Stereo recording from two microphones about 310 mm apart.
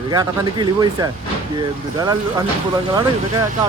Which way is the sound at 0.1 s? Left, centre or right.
Centre.